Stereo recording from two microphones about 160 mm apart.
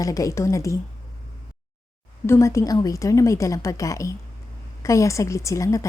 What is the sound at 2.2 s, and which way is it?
A woman's voice, 15° left (ahead or behind).